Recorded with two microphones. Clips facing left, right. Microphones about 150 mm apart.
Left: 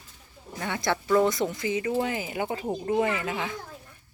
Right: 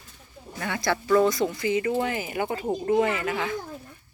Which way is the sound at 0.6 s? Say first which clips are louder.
Right 1 dB; 20° left (ahead or behind).